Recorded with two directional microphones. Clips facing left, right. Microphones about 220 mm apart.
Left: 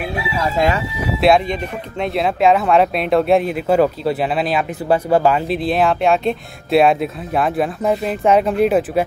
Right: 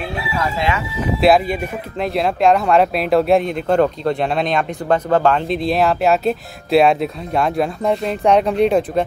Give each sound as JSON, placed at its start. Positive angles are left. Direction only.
{"t": 0.6, "sound": "speech", "side_deg": 40}
{"t": 1.0, "sound": "speech", "side_deg": 0}